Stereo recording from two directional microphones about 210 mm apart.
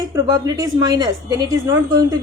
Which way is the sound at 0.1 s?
15° right (ahead or behind).